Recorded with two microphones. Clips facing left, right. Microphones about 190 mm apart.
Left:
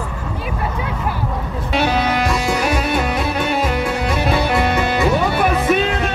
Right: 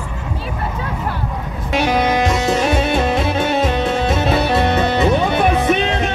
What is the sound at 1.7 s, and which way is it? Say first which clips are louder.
Music: right 2 dB; 15° right (ahead or behind).